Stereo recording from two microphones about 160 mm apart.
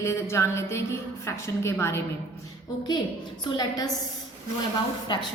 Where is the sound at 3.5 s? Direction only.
25° left (ahead or behind).